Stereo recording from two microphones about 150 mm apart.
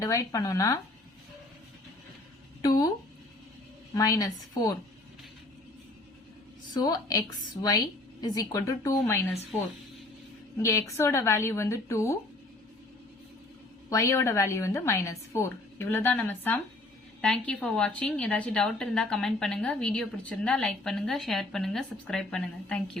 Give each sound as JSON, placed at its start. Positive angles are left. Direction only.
{"t": 0.0, "sound": "a woman's voice", "side_deg": 20}
{"t": 2.6, "sound": "a woman's voice", "side_deg": 25}
{"t": 3.9, "sound": "a woman's voice", "side_deg": 25}
{"t": 7.1, "sound": "a woman's voice", "side_deg": 25}
{"t": 10.6, "sound": "a woman's voice", "side_deg": 20}
{"t": 13.9, "sound": "a woman's voice", "side_deg": 20}